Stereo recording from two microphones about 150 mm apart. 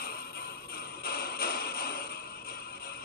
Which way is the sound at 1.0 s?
90° left.